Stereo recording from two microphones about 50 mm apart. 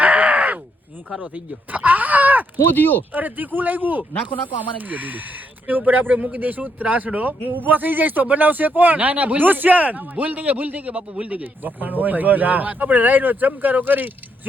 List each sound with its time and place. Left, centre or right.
0.0 s a sound: right
1.7 s groan: right
2.7 s speech: left
3.1 s speech: right
4.1 s speech: left
4.9 s speech: right